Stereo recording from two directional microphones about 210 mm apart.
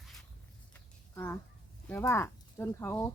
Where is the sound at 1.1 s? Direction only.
10° left (ahead or behind).